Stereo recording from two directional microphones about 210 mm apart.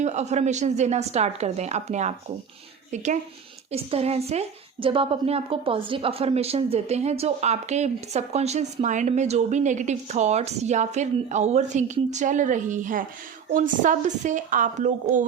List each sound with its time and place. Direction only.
0.0 s a woman's voice: 35° right (ahead or behind)